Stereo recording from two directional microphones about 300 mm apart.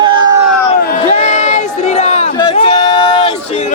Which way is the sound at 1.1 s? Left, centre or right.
Left.